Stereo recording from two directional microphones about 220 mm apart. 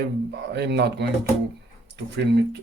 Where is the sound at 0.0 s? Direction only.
50° right (ahead or behind).